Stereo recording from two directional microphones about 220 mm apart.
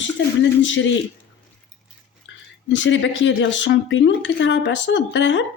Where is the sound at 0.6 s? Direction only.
60° left (ahead or behind).